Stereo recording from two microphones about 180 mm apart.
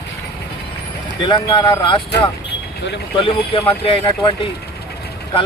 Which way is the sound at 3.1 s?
30° left (ahead or behind).